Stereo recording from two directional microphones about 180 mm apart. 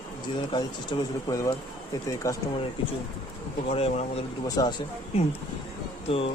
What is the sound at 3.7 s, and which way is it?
Speech, 35° left (ahead or behind).